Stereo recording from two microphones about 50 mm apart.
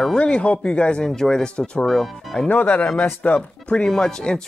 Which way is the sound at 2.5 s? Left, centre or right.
Left.